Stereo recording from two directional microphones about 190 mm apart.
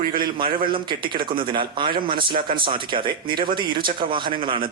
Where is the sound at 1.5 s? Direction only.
25° right (ahead or behind).